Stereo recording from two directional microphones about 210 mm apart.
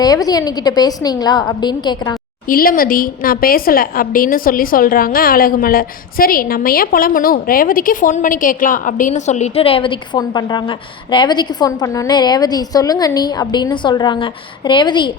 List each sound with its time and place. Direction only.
0.0 s a woman's voice: 20° left (ahead or behind)
2.5 s a woman's voice: 45° left (ahead or behind); by 15.1 s 20° left (ahead or behind)